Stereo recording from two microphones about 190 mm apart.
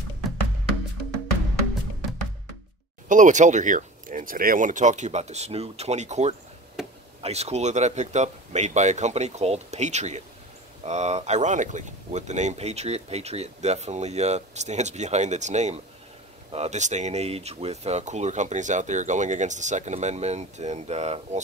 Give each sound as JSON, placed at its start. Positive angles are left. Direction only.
{"t": 3.1, "sound": "speech", "side_deg": -40}
{"t": 6.8, "sound": "a sound", "side_deg": -5}
{"t": 7.2, "sound": "speech", "side_deg": -35}